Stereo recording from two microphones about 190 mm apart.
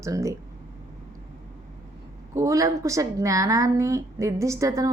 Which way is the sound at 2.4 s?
15° right (ahead or behind).